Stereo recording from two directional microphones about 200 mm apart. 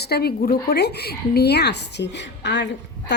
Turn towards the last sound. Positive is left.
turn(degrees=60)  # may be behind; listen again after turning